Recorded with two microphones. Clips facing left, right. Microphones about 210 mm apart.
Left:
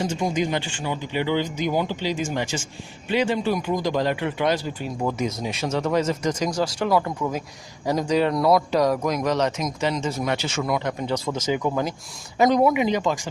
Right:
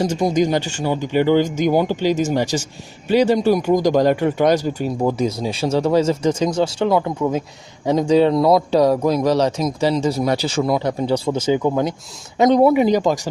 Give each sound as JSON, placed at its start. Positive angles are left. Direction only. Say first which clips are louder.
{"t": 0.0, "sound": "a man's voice", "louder": "right 6 dB", "side_deg": -40}
{"t": 12.5, "sound": "a man's voice", "louder": "right 6 dB", "side_deg": -35}